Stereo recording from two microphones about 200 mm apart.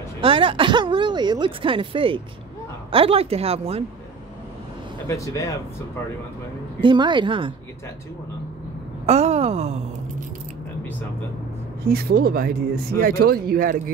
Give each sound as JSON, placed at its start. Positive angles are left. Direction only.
{"t": 0.2, "sound": "speech", "side_deg": -25}
{"t": 5.0, "sound": "speech", "side_deg": 15}
{"t": 6.8, "sound": "speech", "side_deg": -25}
{"t": 9.0, "sound": "a woman's voice", "side_deg": -30}
{"t": 11.9, "sound": "speech", "side_deg": -50}